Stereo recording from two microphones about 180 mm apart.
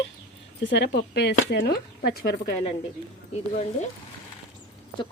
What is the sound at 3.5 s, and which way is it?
Speech, 40° left (ahead or behind).